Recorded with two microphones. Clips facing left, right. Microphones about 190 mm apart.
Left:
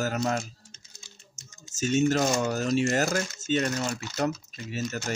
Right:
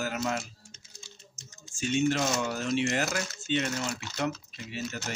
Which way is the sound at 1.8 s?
40° left (ahead or behind).